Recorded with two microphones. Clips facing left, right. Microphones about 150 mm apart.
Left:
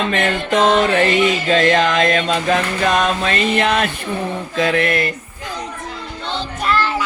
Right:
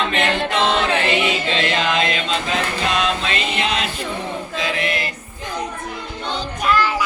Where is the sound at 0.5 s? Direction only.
45° left (ahead or behind).